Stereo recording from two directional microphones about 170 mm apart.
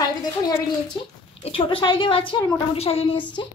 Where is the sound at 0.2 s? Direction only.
25° left (ahead or behind).